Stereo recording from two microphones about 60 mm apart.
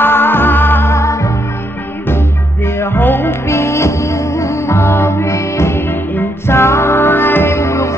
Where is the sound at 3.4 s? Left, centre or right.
Left.